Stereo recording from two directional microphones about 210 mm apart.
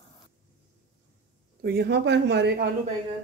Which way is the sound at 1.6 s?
45° right (ahead or behind).